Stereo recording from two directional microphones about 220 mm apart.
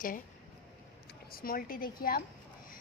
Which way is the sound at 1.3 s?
40° left (ahead or behind).